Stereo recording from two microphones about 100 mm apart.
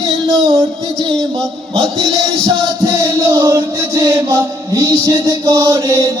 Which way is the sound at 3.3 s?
30° right (ahead or behind).